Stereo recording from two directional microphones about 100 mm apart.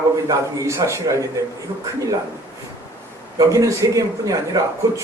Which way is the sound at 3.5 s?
35° right (ahead or behind).